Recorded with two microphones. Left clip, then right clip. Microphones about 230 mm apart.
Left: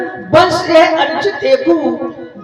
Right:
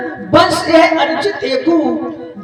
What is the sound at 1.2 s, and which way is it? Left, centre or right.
Speech, right.